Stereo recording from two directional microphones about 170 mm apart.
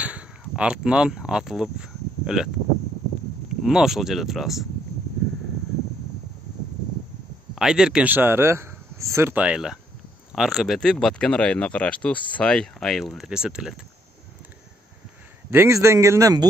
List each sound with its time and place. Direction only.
0.0 s speech: 5° right (ahead or behind)
3.6 s speech: 5° right (ahead or behind)
7.5 s speech: 5° right (ahead or behind)
15.5 s speech: 15° right (ahead or behind)